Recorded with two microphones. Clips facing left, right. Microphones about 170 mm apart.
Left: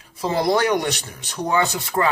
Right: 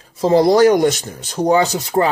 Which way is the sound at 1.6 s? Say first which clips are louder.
Right 5 dB; 20° right (ahead or behind).